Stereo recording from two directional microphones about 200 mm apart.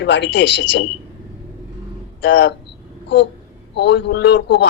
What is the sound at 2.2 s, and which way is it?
Speech, 60° left (ahead or behind).